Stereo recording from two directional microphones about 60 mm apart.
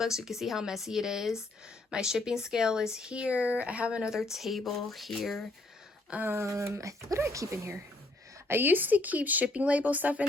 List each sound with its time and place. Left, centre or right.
0.0 s speech: centre
6.4 s speech: right
8.4 s speech: right